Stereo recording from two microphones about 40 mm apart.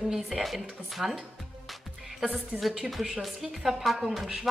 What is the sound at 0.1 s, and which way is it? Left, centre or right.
A woman's voice, centre.